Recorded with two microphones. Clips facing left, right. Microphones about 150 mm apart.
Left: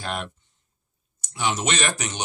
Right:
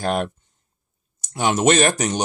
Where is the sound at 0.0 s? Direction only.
45° right (ahead or behind).